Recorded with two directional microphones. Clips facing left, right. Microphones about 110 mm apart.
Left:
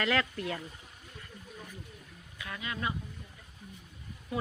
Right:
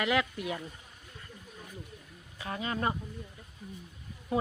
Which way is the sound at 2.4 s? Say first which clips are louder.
Right 4 dB; 35° right (ahead or behind).